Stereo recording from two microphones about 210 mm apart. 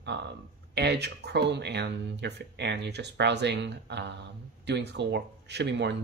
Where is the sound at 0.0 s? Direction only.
55° right (ahead or behind).